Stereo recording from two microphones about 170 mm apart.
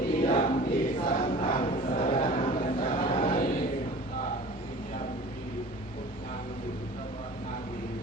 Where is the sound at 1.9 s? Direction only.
55° left (ahead or behind).